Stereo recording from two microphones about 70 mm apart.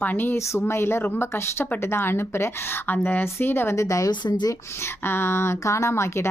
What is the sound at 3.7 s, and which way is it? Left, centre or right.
Speech, left.